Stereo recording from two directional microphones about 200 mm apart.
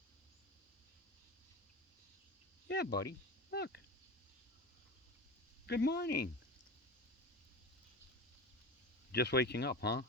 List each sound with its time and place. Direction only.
2.6 s speech: 55° left (ahead or behind)
5.6 s speech: 55° left (ahead or behind)
9.1 s speech: 55° left (ahead or behind)